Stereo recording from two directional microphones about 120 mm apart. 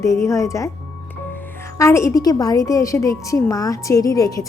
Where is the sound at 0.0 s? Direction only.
25° left (ahead or behind).